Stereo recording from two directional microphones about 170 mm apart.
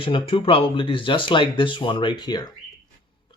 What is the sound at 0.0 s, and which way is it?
Speech, 30° left (ahead or behind).